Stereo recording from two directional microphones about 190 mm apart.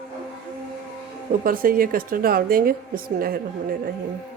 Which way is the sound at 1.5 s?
50° right (ahead or behind).